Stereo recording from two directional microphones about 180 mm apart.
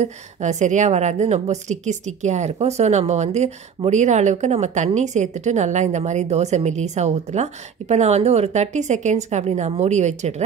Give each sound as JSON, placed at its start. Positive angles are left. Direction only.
{"t": 0.0, "sound": "a woman's voice", "side_deg": -40}